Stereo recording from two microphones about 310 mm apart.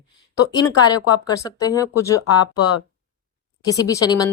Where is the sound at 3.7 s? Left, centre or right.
Centre.